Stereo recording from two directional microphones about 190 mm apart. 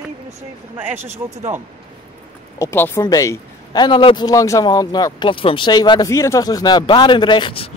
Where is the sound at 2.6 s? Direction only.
10° left (ahead or behind).